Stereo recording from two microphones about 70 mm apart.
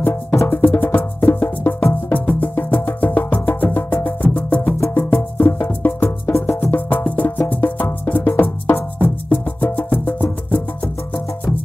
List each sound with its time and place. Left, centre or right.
0.0 s music: left
2.1 s music: left
6.7 s music: left